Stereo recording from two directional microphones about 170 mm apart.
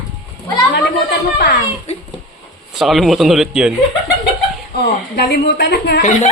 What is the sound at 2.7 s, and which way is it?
A man's voice, centre (ahead or behind).